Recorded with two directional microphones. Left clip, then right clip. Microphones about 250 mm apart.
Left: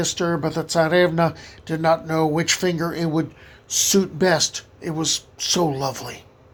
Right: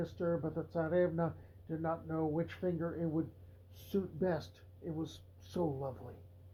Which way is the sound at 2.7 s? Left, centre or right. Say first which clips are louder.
Left 14 dB; left.